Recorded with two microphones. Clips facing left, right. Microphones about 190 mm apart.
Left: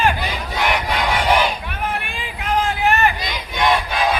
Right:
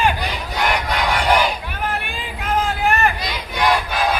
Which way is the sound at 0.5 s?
Centre (ahead or behind).